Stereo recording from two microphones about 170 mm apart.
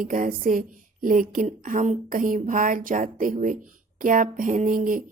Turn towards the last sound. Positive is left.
turn(degrees=-55)  # may be behind; listen again after turning